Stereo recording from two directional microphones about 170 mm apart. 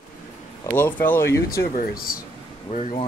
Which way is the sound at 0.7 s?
10° left (ahead or behind).